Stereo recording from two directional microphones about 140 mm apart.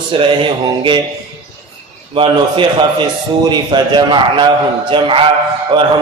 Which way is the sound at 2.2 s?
35° right (ahead or behind).